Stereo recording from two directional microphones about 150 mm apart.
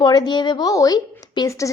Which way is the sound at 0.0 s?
25° left (ahead or behind).